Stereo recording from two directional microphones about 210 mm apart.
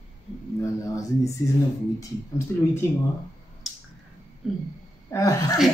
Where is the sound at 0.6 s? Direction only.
15° left (ahead or behind).